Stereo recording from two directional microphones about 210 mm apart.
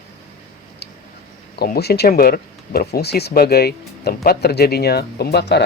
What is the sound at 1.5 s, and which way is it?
Speech, 50° left (ahead or behind).